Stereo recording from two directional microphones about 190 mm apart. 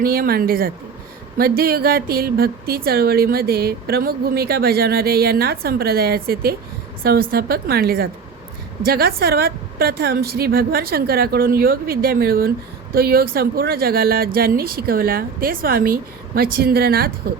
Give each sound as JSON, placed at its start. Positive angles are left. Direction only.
{"t": 0.0, "sound": "a woman's voice", "side_deg": -50}